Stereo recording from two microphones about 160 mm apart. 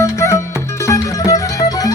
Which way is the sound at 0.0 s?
20° left (ahead or behind).